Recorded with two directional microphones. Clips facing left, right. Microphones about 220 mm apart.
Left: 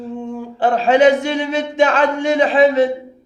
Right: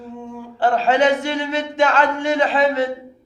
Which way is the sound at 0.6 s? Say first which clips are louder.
Left 4 dB; 15° left (ahead or behind).